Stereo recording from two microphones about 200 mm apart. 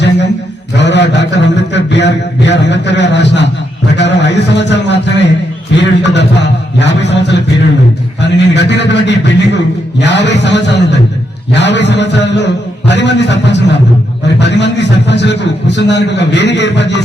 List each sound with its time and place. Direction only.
0.8 s a man's voice: 60° left (ahead or behind)